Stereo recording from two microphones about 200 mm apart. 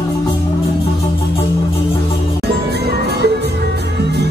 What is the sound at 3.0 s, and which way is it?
Music, 55° right (ahead or behind).